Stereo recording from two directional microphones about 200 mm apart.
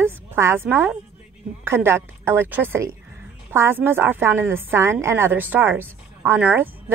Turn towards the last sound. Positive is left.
turn(degrees=-10)  # may be behind; listen again after turning